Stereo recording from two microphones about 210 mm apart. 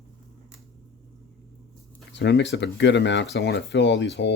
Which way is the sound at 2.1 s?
55° left (ahead or behind).